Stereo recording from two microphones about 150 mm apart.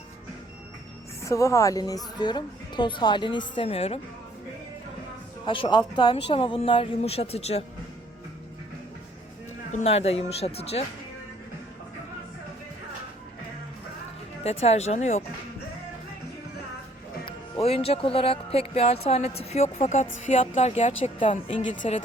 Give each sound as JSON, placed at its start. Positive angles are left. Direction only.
{"t": 1.2, "sound": "a woman's voice", "side_deg": 20}
{"t": 5.5, "sound": "a woman's voice", "side_deg": 35}
{"t": 9.7, "sound": "speech", "side_deg": 45}
{"t": 14.4, "sound": "speech", "side_deg": 45}
{"t": 17.2, "sound": "speech", "side_deg": 40}